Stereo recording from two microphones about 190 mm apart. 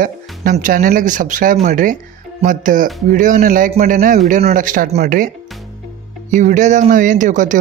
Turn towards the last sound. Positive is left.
turn(degrees=-40)  # may be behind; listen again after turning